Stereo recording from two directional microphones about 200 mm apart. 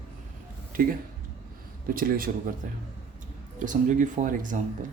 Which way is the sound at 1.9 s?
45° right (ahead or behind).